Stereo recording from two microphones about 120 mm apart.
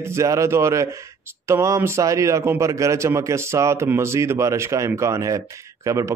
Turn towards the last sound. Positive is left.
turn(degrees=-25)  # may be behind; listen again after turning